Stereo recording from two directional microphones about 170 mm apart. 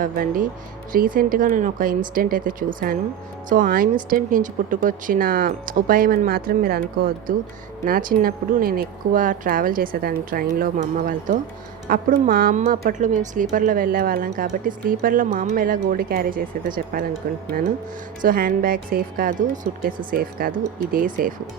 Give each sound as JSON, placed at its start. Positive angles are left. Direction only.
{"t": 0.0, "sound": "a woman's voice", "side_deg": -50}